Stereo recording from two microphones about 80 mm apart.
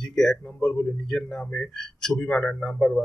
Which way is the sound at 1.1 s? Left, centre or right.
Centre.